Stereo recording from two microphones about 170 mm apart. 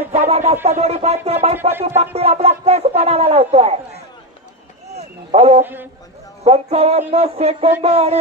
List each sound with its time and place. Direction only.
0.1 s speech: 40° right (ahead or behind)
4.9 s speech: 35° right (ahead or behind)